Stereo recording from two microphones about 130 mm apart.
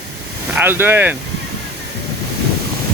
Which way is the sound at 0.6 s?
15° right (ahead or behind).